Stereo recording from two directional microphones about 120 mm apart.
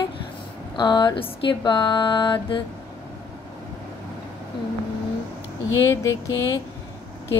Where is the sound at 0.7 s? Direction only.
40° left (ahead or behind).